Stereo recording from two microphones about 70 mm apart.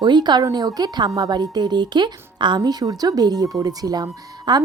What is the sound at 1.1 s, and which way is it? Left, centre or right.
A woman's voice, right.